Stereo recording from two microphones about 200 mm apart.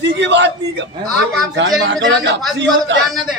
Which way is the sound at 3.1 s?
Centre (ahead or behind).